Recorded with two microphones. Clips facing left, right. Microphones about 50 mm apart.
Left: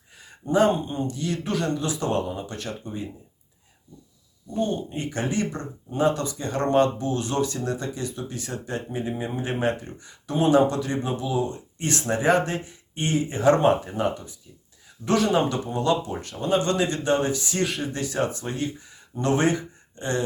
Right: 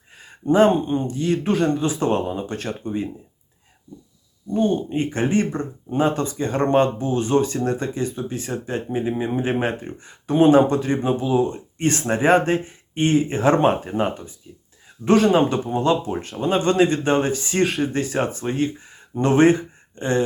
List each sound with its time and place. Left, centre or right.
0.2 s speech: right
4.5 s speech: right